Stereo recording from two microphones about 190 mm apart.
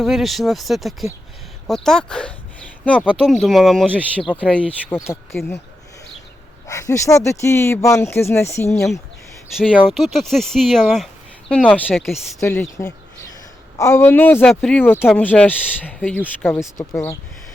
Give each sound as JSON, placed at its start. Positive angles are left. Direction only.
{"t": 0.0, "sound": "speech", "side_deg": 0}
{"t": 6.7, "sound": "speech", "side_deg": 15}
{"t": 9.6, "sound": "speech", "side_deg": -5}
{"t": 13.7, "sound": "speech", "side_deg": 15}